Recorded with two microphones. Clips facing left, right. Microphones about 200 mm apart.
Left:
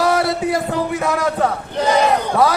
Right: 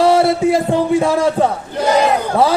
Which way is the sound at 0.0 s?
25° right (ahead or behind).